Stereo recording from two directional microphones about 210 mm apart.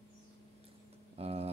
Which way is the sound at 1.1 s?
30° right (ahead or behind).